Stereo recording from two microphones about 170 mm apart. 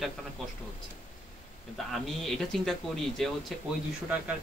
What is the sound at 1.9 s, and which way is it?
Speech, centre (ahead or behind).